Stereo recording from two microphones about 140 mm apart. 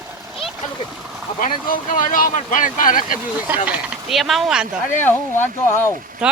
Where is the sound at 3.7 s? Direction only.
5° right (ahead or behind).